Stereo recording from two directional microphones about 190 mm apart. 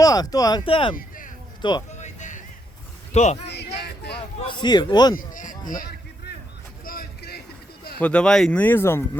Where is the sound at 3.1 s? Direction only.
40° left (ahead or behind).